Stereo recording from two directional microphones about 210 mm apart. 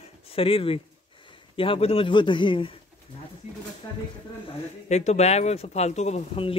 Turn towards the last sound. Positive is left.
turn(degrees=30)  # may be behind; listen again after turning